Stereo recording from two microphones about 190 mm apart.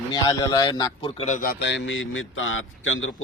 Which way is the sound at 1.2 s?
40° left (ahead or behind).